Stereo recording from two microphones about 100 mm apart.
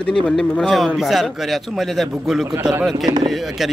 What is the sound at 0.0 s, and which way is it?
A man's voice, 5° left (ahead or behind).